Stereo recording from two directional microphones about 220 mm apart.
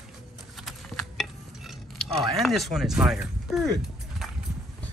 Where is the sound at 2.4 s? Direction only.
Centre (ahead or behind).